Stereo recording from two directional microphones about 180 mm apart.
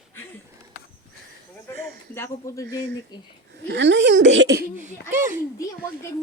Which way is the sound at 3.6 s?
75° right (ahead or behind).